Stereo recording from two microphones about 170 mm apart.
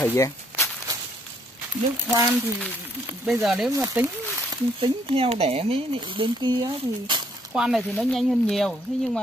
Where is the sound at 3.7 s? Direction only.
15° right (ahead or behind).